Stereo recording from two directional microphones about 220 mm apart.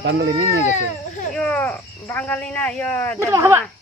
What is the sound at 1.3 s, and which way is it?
Speech, 5° left (ahead or behind).